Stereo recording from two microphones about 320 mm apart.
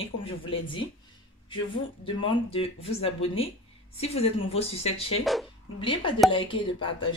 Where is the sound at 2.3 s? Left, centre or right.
Centre.